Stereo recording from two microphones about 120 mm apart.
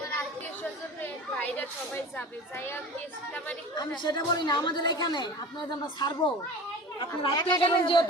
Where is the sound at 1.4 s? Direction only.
15° left (ahead or behind).